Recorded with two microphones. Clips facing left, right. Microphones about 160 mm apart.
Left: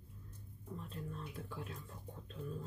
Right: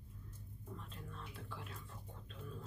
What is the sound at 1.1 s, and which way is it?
Speech, 40° left (ahead or behind).